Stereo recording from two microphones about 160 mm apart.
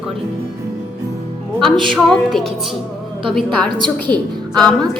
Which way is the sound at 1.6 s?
Centre (ahead or behind).